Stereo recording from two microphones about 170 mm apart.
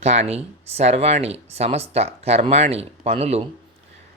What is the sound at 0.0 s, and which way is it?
Speech, 40° right (ahead or behind).